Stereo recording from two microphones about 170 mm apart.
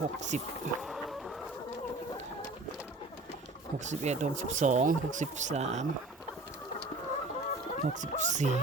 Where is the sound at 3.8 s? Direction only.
45° right (ahead or behind).